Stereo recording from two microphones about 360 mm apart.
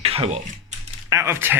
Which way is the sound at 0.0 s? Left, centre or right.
Centre.